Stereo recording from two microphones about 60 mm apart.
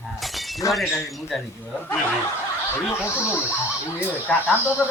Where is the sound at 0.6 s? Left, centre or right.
Left.